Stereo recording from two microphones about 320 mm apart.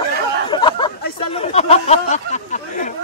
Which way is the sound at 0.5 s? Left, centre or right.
Centre.